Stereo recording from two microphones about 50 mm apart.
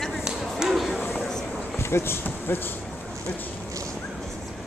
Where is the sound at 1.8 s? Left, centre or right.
Left.